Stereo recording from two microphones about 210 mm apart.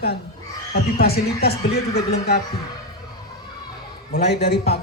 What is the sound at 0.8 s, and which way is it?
Speech, 45° left (ahead or behind).